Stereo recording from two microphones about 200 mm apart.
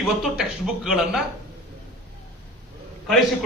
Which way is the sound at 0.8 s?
Centre (ahead or behind).